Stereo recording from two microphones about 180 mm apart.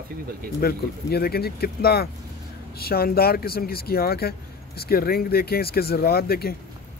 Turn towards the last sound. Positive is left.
turn(degrees=60)  # may be behind; listen again after turning